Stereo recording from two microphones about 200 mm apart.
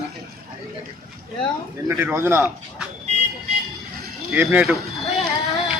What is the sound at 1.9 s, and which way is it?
Speech, 10° right (ahead or behind).